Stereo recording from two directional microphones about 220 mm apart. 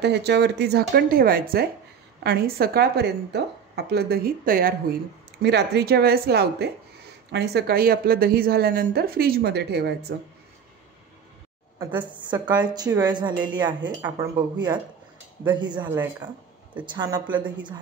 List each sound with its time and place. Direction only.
0.0 s a woman's voice: 50° right (ahead or behind)
11.8 s a woman's voice: 20° right (ahead or behind)